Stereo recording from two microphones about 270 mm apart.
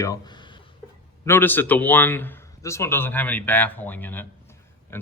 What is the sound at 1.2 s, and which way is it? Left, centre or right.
Speech, centre.